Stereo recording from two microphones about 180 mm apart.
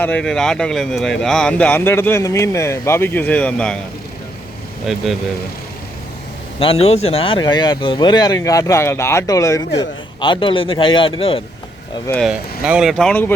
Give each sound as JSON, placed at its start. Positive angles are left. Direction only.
{"t": 0.0, "sound": "speech", "side_deg": 5}
{"t": 4.9, "sound": "speech", "side_deg": 0}
{"t": 6.6, "sound": "speech", "side_deg": 30}
{"t": 12.2, "sound": "speech", "side_deg": -5}